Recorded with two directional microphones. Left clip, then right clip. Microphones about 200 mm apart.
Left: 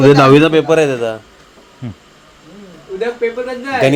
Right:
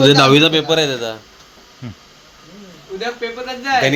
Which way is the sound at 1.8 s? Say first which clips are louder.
Left 4 dB; 15° left (ahead or behind).